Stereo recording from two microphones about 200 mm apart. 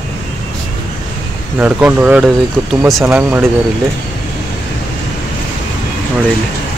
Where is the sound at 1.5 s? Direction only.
5° right (ahead or behind).